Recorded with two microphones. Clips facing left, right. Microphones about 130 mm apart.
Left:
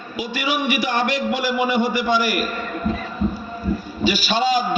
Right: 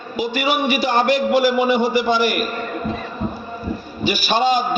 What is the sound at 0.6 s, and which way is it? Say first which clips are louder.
A man's voice: right 4 dB; 30° right (ahead or behind).